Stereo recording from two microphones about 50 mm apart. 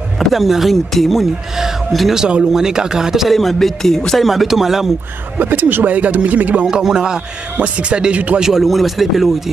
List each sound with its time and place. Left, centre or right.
0.3 s speech: centre
2.1 s a man's voice: centre
3.3 s speech: centre
4.3 s a man's voice: centre
5.4 s speech: right
5.9 s speech: right
6.6 s a man's voice: centre
7.5 s speech: right
8.4 s speech: centre